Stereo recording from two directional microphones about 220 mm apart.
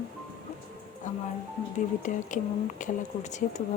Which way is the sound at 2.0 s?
35° left (ahead or behind).